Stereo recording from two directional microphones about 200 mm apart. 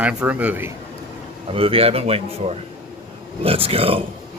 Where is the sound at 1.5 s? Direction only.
30° right (ahead or behind).